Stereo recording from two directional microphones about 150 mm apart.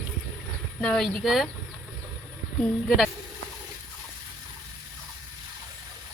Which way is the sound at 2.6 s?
Centre (ahead or behind).